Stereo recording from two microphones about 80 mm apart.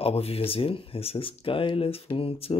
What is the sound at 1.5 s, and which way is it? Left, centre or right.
Speech, left.